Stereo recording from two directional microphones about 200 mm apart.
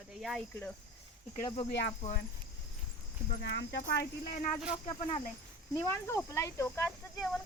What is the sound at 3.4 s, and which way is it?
Speech, 60° left (ahead or behind).